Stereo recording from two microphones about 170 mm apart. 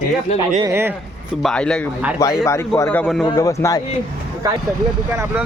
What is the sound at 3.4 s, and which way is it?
Speech, 20° left (ahead or behind).